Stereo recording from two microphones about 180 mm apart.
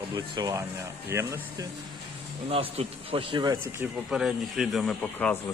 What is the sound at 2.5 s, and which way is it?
Speech, 30° right (ahead or behind).